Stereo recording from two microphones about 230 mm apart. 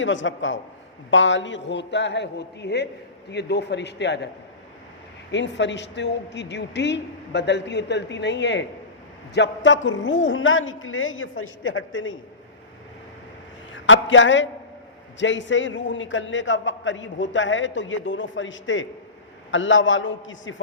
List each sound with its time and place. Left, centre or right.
0.0 s a woman's voice: left
5.3 s a man's voice: left
13.7 s a man's voice: left